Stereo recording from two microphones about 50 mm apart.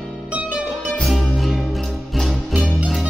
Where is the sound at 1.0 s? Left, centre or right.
Centre.